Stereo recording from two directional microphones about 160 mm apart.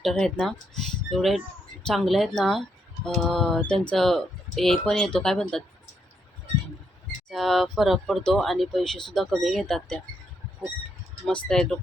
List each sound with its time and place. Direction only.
0.0 s speech: centre (ahead or behind)
7.3 s speech: centre (ahead or behind)
11.3 s speech: 5° left (ahead or behind)